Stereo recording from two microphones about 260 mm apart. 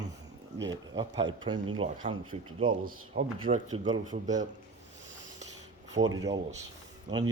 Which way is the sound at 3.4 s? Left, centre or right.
Right.